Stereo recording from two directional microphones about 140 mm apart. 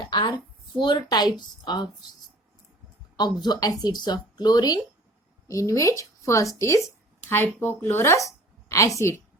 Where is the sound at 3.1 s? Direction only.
30° left (ahead or behind).